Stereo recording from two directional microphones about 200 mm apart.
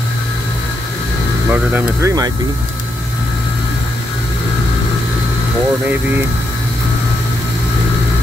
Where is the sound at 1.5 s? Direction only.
10° right (ahead or behind).